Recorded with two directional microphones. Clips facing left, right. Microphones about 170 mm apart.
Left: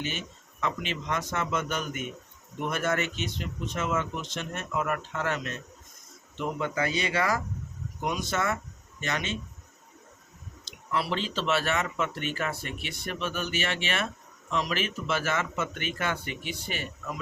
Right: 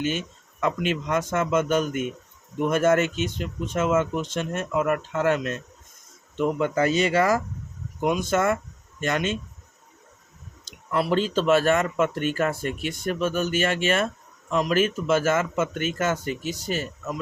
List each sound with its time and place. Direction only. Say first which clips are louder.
0.6 s speech: right 7 dB; 50° right (ahead or behind)
10.7 s speech: right 6 dB; 50° right (ahead or behind)